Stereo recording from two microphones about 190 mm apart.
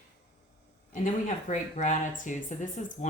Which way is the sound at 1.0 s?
40° left (ahead or behind).